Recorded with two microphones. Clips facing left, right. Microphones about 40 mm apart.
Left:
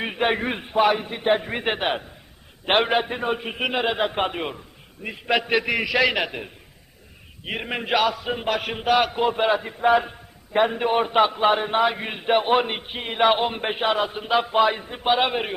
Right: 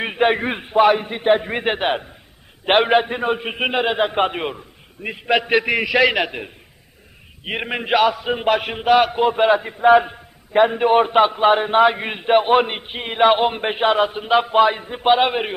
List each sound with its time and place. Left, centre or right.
0.0 s a man's voice: centre
5.0 s a man's voice: centre
5.4 s a man's voice: centre
7.7 s a man's voice: centre